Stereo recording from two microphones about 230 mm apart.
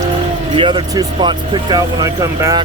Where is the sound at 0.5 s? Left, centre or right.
Right.